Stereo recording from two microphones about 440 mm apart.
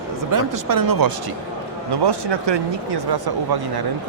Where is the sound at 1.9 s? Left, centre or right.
Right.